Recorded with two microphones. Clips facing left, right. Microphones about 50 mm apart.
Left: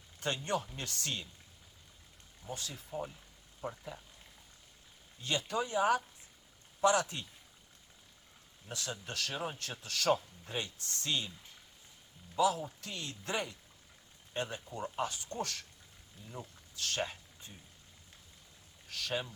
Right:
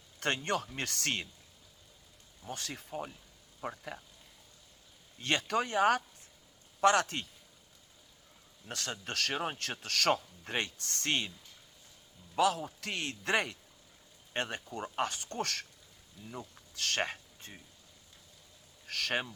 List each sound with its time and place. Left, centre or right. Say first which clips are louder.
0.2 s a man's voice: right 2 dB; right
2.5 s a man's voice: right 1 dB; right
3.6 s speech: right 2 dB; right
5.2 s speech: right 3 dB; right
8.7 s a man's voice: right 3 dB; right
12.4 s a man's voice: right 1 dB; right
16.7 s speech: right 4 dB; right
17.0 s a sound: right 3 dB; right
18.9 s speech: right 5 dB; right